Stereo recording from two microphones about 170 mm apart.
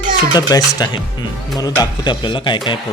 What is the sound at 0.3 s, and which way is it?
Speech, 20° left (ahead or behind).